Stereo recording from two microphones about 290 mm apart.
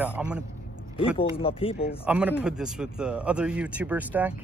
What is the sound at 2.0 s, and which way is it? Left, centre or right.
Speech, centre.